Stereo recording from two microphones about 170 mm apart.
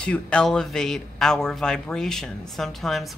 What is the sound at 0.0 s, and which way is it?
Speech, 5° left (ahead or behind).